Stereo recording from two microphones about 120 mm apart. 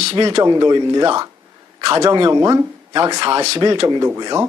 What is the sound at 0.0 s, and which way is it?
Speech, 50° right (ahead or behind).